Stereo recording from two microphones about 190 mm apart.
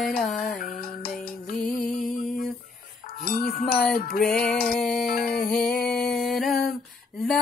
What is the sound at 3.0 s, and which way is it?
Music, 50° left (ahead or behind).